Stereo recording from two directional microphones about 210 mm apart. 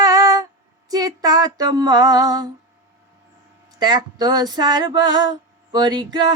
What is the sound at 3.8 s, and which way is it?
Female singing, 20° right (ahead or behind).